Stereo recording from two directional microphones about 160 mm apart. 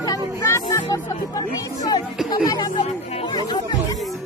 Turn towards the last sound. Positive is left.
turn(degrees=30)  # may be behind; listen again after turning